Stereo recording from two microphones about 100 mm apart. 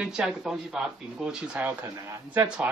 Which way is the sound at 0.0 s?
5° right (ahead or behind).